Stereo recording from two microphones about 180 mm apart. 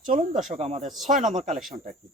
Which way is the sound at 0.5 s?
40° right (ahead or behind).